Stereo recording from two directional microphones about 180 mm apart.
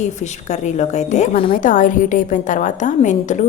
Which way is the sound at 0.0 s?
40° left (ahead or behind).